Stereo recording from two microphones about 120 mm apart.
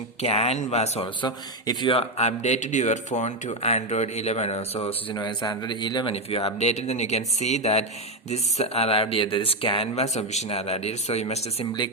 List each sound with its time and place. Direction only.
0.2 s speech: 60° left (ahead or behind)
1.2 s speech: 40° left (ahead or behind)
5.1 s a man's voice: 35° left (ahead or behind)
6.3 s speech: 55° left (ahead or behind)